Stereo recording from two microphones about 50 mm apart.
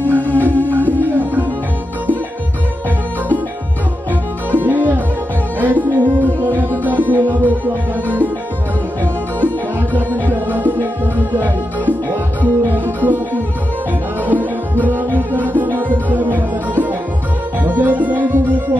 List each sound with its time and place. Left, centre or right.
0.4 s music: right
4.5 s music: right